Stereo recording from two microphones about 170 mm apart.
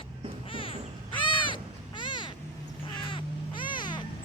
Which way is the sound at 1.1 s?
30° left (ahead or behind).